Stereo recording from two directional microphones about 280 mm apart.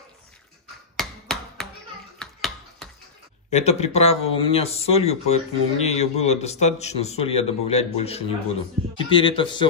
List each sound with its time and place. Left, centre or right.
0.9 s tap: centre
2.1 s a sound: centre
3.4 s a man's voice: left